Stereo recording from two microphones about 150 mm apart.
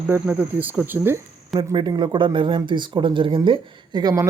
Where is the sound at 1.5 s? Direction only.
30° right (ahead or behind).